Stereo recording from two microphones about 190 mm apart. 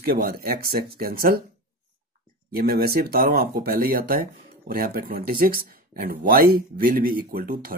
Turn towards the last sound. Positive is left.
turn(degrees=-50)  # may be behind; listen again after turning